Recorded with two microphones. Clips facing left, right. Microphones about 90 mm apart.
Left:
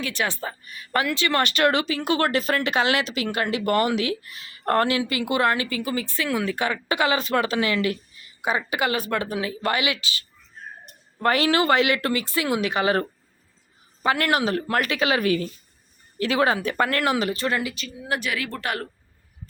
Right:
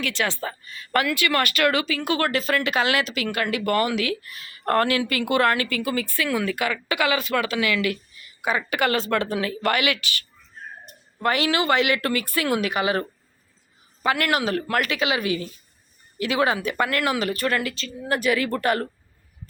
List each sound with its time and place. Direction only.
0.0 s a woman's voice: 20° left (ahead or behind)
11.2 s a woman's voice: 35° left (ahead or behind); by 18.9 s centre (ahead or behind)